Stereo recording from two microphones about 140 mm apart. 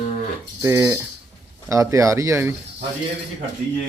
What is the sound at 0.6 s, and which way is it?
Speech, 20° right (ahead or behind).